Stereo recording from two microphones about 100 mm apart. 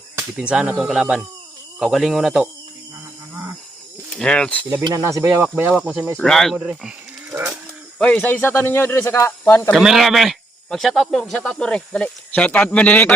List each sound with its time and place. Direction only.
0.3 s speech: 10° right (ahead or behind)
4.2 s speech: 10° left (ahead or behind)
4.9 s speech: 30° right (ahead or behind)
6.1 s speech: 5° left (ahead or behind)
6.6 s speech: 10° right (ahead or behind)
7.3 s pigeon: 25° right (ahead or behind)
7.9 s speech: 10° left (ahead or behind)
9.7 s speech: centre (ahead or behind); by 13.1 s 15° left (ahead or behind)